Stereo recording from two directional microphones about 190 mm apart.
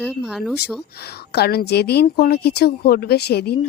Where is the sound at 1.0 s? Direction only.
55° left (ahead or behind).